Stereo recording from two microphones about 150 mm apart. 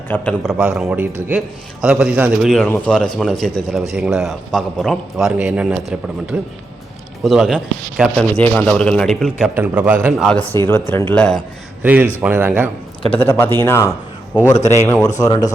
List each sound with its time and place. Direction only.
0.1 s a man's voice: 10° left (ahead or behind)
0.4 s a man's voice: 5° right (ahead or behind)
2.6 s a man's voice: 10° left (ahead or behind)
9.6 s speech: 10° right (ahead or behind)
10.2 s a man's voice: centre (ahead or behind)
10.5 s a man's voice: 15° left (ahead or behind)
11.8 s speech: 10° right (ahead or behind)
13.1 s a man's voice: 15° left (ahead or behind)
14.5 s a man's voice: 50° left (ahead or behind)
15.2 s speech: 25° left (ahead or behind)